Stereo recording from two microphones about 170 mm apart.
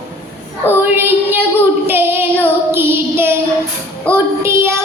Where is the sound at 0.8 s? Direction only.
10° right (ahead or behind).